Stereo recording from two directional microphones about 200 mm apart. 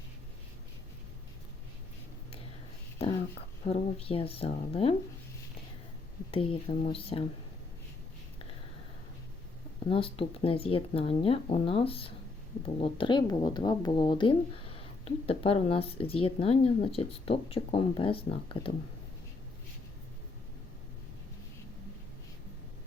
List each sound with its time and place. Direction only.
3.7 s speech: 30° left (ahead or behind)
6.3 s speech: 30° left (ahead or behind)
9.8 s speech: 25° left (ahead or behind)